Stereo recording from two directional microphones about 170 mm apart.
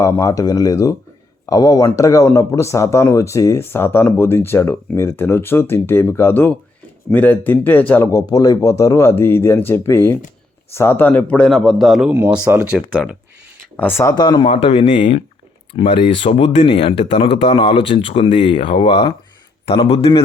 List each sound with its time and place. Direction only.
0.0 s speech: 20° left (ahead or behind); by 12.1 s centre (ahead or behind)
12.1 s speech: 15° right (ahead or behind)
13.7 s speech: 15° left (ahead or behind); by 15.2 s 45° left (ahead or behind)
15.7 s speech: 30° left (ahead or behind)
16.2 s speech: 40° left (ahead or behind)
16.6 s speech: 30° left (ahead or behind)